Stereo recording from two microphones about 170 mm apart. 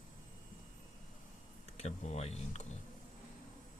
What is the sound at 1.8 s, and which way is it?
Speech, 40° left (ahead or behind).